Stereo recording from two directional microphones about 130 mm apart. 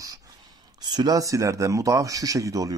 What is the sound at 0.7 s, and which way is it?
A man's voice, 35° right (ahead or behind).